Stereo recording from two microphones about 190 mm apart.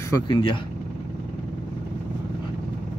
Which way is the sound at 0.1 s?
25° left (ahead or behind).